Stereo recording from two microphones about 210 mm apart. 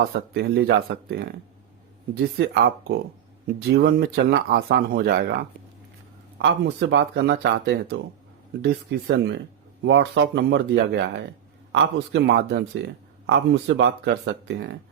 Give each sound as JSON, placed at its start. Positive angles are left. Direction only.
{"t": 0.0, "sound": "speech", "side_deg": -50}